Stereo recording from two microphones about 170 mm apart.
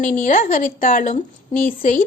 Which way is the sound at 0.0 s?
50° left (ahead or behind).